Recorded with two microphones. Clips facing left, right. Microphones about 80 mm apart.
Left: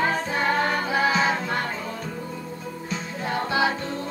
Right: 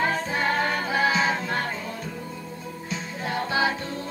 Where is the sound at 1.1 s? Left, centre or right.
Left.